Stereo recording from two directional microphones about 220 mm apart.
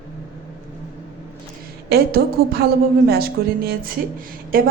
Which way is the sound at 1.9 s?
45° right (ahead or behind).